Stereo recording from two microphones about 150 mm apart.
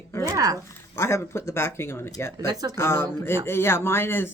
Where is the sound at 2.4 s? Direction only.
25° right (ahead or behind).